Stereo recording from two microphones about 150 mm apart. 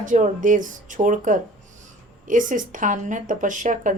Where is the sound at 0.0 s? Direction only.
60° right (ahead or behind).